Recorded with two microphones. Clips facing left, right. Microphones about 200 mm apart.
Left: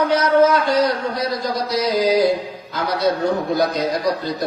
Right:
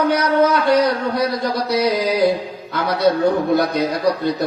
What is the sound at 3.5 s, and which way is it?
Speech, 60° right (ahead or behind).